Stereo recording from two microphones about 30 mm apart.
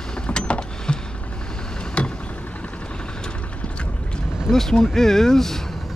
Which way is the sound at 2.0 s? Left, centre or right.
Left.